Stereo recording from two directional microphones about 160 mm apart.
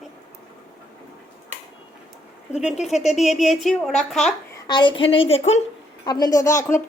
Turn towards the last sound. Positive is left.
turn(degrees=15)  # may be behind; listen again after turning